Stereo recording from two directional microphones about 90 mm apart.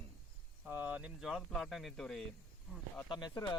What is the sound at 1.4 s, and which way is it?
Speech, 5° left (ahead or behind).